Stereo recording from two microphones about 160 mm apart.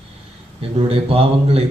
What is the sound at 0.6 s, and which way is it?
A man's voice, 35° right (ahead or behind).